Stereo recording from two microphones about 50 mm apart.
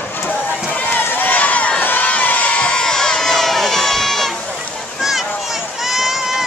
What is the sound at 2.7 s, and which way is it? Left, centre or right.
Run, centre.